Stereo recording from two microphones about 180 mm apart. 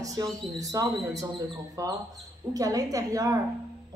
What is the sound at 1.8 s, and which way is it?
Speech, 20° right (ahead or behind).